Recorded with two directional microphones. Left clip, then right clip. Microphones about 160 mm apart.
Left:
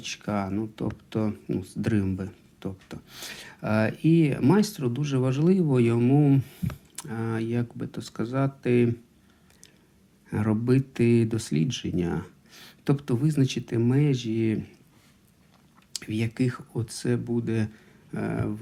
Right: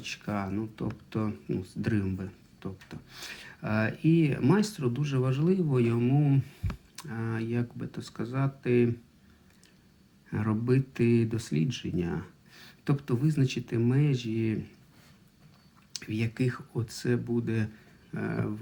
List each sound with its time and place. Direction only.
0.0 s speech: 20° left (ahead or behind)
10.2 s speech: 25° left (ahead or behind)
15.9 s speech: 25° left (ahead or behind)